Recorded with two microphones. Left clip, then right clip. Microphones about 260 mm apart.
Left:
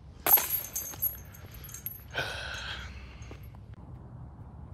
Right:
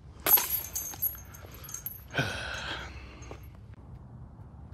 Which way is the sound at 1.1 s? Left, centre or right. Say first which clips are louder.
Right 2 dB; centre.